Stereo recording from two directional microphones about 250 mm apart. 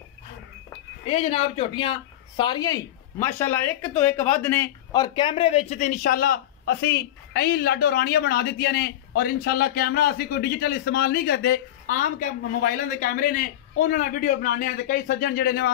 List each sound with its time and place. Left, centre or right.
1.0 s a man's voice: left